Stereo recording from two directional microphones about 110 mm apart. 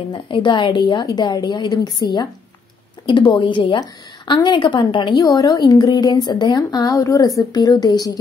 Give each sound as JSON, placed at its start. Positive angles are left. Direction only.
{"t": 0.1, "sound": "a woman's voice", "side_deg": 45}
{"t": 5.2, "sound": "speech", "side_deg": 35}